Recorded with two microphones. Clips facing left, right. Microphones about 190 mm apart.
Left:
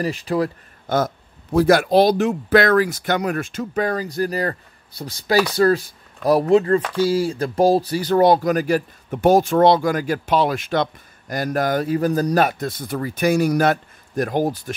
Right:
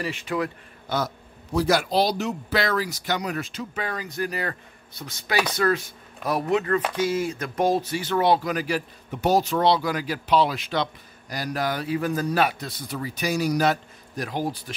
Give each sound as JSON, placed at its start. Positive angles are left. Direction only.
{"t": 0.0, "sound": "speech", "side_deg": 35}
{"t": 0.8, "sound": "speech", "side_deg": 50}